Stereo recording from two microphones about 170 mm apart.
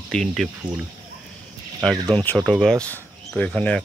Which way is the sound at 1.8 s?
5° left (ahead or behind).